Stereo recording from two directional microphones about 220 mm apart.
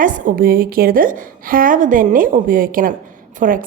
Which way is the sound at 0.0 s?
35° right (ahead or behind).